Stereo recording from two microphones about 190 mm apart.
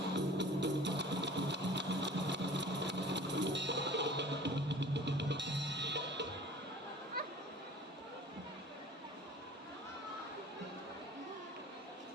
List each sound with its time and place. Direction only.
0.1 s music: 65° right (ahead or behind)